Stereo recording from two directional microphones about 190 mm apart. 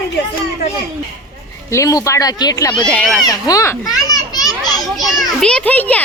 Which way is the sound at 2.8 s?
5° left (ahead or behind).